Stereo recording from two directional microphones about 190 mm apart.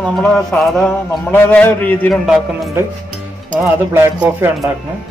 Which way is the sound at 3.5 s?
10° right (ahead or behind).